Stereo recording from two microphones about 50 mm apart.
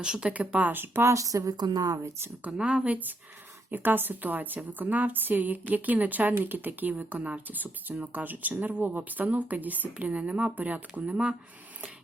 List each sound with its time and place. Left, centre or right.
0.0 s speech: centre
0.3 s a woman's voice: right
0.8 s speech: right
1.1 s speech: right
2.6 s a woman's voice: right